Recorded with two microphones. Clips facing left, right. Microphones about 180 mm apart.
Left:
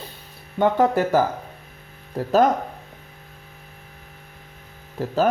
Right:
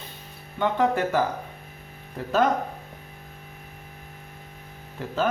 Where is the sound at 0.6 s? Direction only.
40° left (ahead or behind).